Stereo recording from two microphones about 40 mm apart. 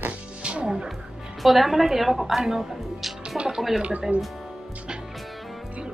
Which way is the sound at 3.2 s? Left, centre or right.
Right.